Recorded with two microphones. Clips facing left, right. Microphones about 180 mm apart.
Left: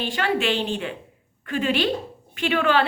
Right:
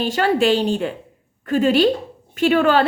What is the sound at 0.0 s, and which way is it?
A woman's voice, 40° right (ahead or behind).